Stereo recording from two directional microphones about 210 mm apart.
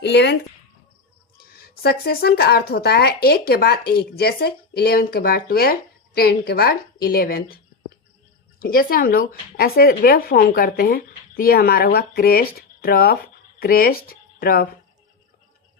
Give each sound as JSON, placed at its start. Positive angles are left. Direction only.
{"t": 0.0, "sound": "speech", "side_deg": 55}
{"t": 1.4, "sound": "speech", "side_deg": 45}